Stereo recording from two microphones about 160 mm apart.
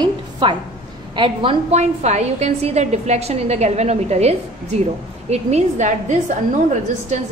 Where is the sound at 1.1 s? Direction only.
35° right (ahead or behind).